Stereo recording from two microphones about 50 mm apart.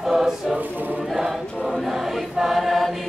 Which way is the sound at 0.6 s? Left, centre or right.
Right.